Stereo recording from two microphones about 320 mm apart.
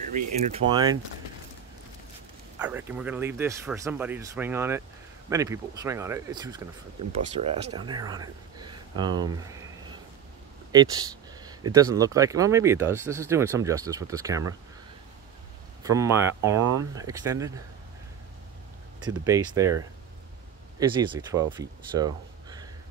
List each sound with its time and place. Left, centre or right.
0.1 s speech: centre
2.6 s speech: centre
10.7 s a sound: centre
11.7 s speech: centre
16.0 s speech: centre
18.9 s speech: centre
20.9 s speech: centre